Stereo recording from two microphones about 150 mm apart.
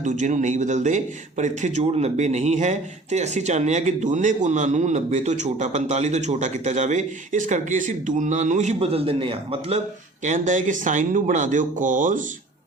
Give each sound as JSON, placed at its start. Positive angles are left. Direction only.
{"t": 0.0, "sound": "a man's voice", "side_deg": -55}
{"t": 10.2, "sound": "speech", "side_deg": -60}